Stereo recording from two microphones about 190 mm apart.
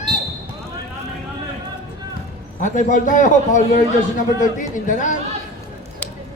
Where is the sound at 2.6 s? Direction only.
40° left (ahead or behind).